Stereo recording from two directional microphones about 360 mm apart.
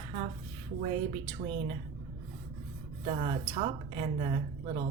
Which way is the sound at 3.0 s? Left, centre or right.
Centre.